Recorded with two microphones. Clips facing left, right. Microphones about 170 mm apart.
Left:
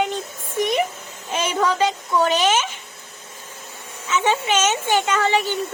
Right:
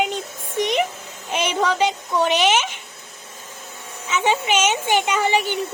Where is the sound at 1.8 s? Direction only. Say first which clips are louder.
Left 1 dB; 15° right (ahead or behind).